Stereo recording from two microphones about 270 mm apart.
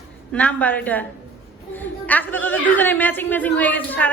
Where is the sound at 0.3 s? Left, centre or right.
Centre.